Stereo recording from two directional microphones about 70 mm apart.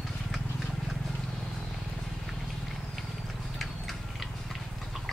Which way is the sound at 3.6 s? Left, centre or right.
Centre.